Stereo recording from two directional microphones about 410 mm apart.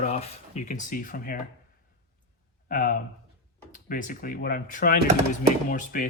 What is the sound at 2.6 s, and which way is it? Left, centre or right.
Speech, centre.